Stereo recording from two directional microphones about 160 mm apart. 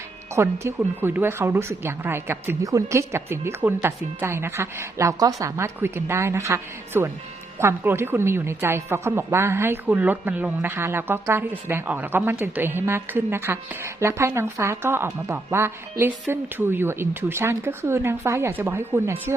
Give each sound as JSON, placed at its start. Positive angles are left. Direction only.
{"t": 0.3, "sound": "a woman's voice", "side_deg": -15}